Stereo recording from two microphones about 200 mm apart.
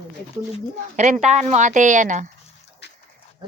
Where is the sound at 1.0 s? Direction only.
35° right (ahead or behind).